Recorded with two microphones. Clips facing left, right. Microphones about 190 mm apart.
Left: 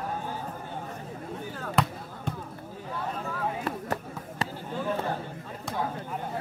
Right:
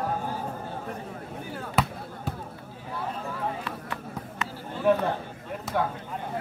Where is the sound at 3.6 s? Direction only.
40° left (ahead or behind).